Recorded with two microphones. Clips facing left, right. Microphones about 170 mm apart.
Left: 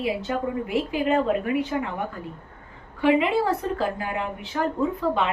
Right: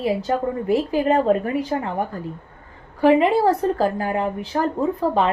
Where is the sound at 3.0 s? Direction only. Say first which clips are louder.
Right 5 dB; 40° right (ahead or behind).